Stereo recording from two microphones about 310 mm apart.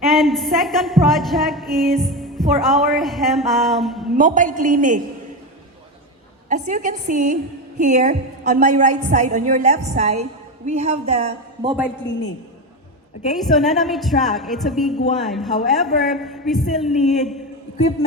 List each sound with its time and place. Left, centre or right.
0.0 s a woman's voice: centre
4.2 s a woman's voice: right
6.5 s a woman's voice: right
13.3 s a man's voice: centre